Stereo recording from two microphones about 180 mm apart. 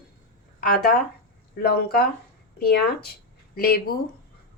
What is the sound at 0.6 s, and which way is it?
Speech, 55° left (ahead or behind).